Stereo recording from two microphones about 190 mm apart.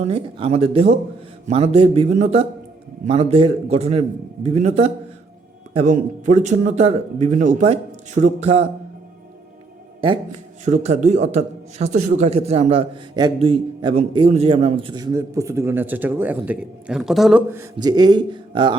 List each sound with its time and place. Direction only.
0.0 s speech: 30° right (ahead or behind)
10.7 s a man's voice: 40° right (ahead or behind); by 17.4 s centre (ahead or behind)
17.5 s a man's voice: 15° right (ahead or behind)